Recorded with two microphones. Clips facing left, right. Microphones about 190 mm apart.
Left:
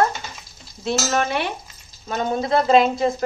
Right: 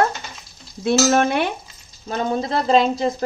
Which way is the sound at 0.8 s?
50° right (ahead or behind).